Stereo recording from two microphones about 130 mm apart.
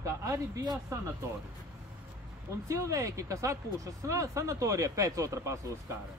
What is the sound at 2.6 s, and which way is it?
Speech, 25° right (ahead or behind).